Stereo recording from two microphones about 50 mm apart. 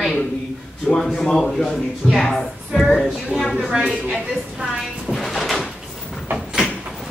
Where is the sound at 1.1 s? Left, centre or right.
Centre.